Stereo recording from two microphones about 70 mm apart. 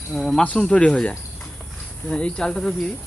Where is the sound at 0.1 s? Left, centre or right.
Centre.